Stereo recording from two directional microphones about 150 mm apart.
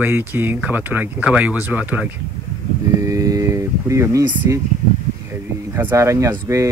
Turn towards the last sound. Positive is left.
turn(degrees=-20)  # may be behind; listen again after turning